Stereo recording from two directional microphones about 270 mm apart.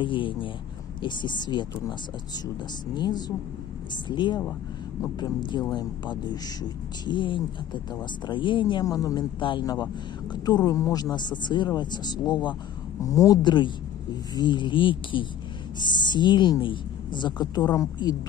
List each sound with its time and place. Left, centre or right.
0.0 s speech: centre
3.0 s speech: centre